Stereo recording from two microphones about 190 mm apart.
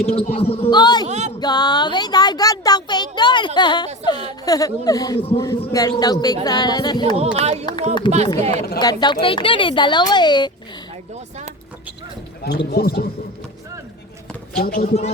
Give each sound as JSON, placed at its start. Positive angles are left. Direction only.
{"t": 0.0, "sound": "a man's voice", "side_deg": 35}
{"t": 1.0, "sound": "speech", "side_deg": -35}
{"t": 1.4, "sound": "a child's voice", "side_deg": 20}
{"t": 7.3, "sound": "speech", "side_deg": -35}
{"t": 7.6, "sound": "a child's voice", "side_deg": 20}
{"t": 8.4, "sound": "speech", "side_deg": -35}
{"t": 8.8, "sound": "a child's voice", "side_deg": 20}
{"t": 12.4, "sound": "speech", "side_deg": 55}
{"t": 14.5, "sound": "speech", "side_deg": 50}